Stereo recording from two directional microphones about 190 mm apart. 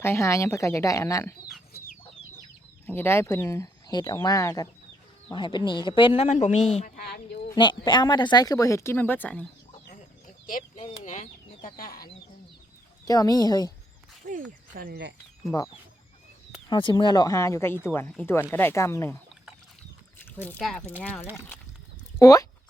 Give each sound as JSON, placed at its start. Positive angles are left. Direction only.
{"t": 0.0, "sound": "speech", "side_deg": 15}
{"t": 1.7, "sound": "chicken", "side_deg": 55}
{"t": 2.8, "sound": "speech", "side_deg": 10}
{"t": 6.9, "sound": "speech", "side_deg": 55}
{"t": 7.5, "sound": "speech", "side_deg": 25}
{"t": 9.8, "sound": "chicken", "side_deg": 45}
{"t": 13.1, "sound": "speech", "side_deg": 20}
{"t": 14.7, "sound": "speech", "side_deg": -50}
{"t": 15.4, "sound": "speech", "side_deg": 15}
{"t": 20.2, "sound": "speech", "side_deg": 10}
{"t": 22.2, "sound": "speech", "side_deg": 20}